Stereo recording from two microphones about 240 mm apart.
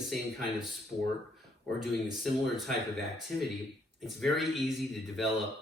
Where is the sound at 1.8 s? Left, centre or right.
Centre.